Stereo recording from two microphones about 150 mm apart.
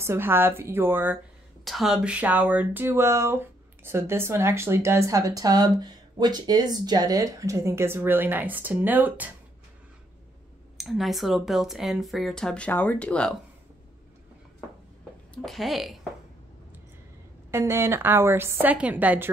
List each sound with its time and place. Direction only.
0.0 s speech: 15° right (ahead or behind)
1.6 s speech: centre (ahead or behind)
10.8 s speech: centre (ahead or behind)
15.3 s speech: centre (ahead or behind)
17.5 s speech: 15° right (ahead or behind)